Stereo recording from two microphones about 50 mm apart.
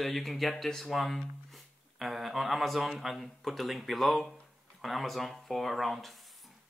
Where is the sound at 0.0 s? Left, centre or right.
Centre.